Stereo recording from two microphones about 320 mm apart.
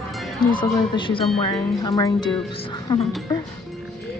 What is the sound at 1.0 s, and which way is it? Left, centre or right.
Speech, centre.